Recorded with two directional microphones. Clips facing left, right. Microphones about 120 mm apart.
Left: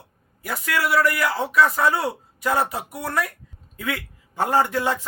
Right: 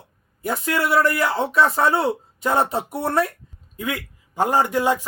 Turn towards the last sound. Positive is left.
turn(degrees=-15)  # may be behind; listen again after turning